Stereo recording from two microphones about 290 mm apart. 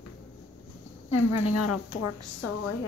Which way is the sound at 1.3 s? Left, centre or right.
Left.